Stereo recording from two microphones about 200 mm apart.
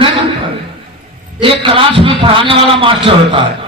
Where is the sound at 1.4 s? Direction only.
25° right (ahead or behind).